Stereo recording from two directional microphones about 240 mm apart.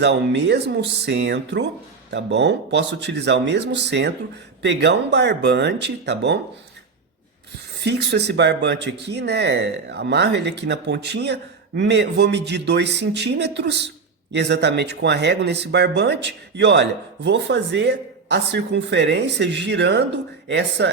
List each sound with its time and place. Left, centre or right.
0.0 s speech: right
7.9 s speech: right